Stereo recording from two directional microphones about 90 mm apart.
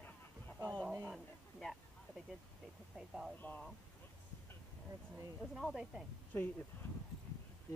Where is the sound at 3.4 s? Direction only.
15° left (ahead or behind).